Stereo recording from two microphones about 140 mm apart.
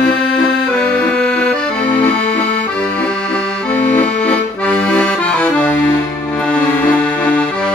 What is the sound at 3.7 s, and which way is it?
Accordion, 10° left (ahead or behind).